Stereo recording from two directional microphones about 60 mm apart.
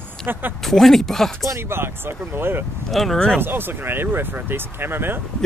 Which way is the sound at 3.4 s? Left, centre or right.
Right.